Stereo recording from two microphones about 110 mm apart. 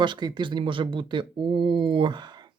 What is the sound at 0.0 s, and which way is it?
Speech, 45° right (ahead or behind).